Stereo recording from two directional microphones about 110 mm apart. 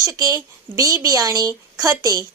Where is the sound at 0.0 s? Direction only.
30° right (ahead or behind).